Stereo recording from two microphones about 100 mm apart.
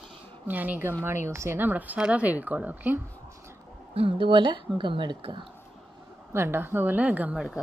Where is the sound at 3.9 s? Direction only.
65° right (ahead or behind).